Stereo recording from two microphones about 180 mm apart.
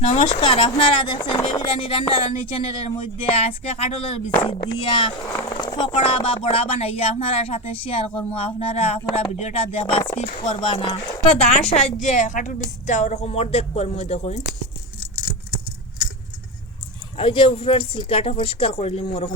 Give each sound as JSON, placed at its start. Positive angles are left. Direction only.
{"t": 0.0, "sound": "speech", "side_deg": 35}
{"t": 17.2, "sound": "speech", "side_deg": 30}